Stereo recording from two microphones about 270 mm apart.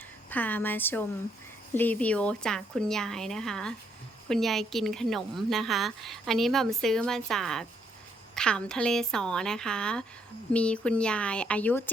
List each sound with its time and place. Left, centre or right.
0.3 s a woman's voice: centre